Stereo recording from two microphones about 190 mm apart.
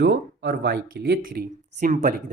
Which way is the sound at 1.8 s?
40° right (ahead or behind).